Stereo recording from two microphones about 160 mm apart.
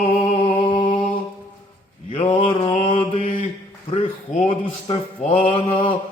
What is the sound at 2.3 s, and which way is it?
Mantra, 35° left (ahead or behind).